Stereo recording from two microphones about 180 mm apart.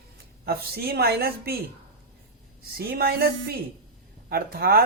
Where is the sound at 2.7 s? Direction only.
55° right (ahead or behind).